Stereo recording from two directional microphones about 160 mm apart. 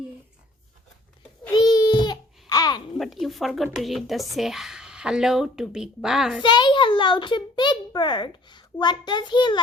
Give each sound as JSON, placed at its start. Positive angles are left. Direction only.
{"t": 1.5, "sound": "babbling", "side_deg": 25}
{"t": 3.0, "sound": "speech", "side_deg": 0}
{"t": 6.4, "sound": "a child's voice", "side_deg": 30}